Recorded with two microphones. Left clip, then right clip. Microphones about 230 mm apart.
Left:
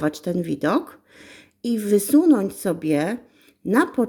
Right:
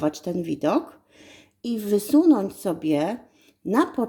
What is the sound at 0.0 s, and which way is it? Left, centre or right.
Speech, centre.